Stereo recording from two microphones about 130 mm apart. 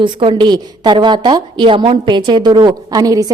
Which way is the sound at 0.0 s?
40° right (ahead or behind).